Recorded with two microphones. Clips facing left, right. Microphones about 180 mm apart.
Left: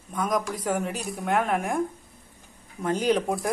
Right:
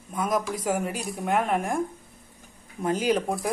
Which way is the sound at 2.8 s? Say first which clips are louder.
Left 1 dB; 5° right (ahead or behind).